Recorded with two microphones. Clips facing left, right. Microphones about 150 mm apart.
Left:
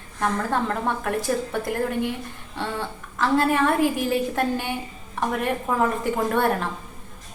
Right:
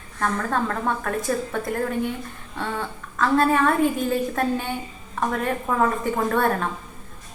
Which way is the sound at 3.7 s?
70° left (ahead or behind).